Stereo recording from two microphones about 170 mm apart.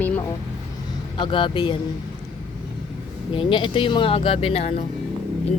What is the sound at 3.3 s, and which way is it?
Speech, 30° left (ahead or behind).